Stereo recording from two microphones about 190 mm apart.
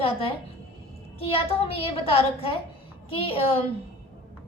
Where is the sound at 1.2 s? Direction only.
30° left (ahead or behind).